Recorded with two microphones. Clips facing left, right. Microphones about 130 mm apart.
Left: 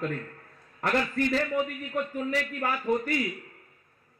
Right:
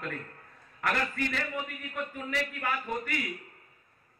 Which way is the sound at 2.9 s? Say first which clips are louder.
Left 8 dB; 35° left (ahead or behind).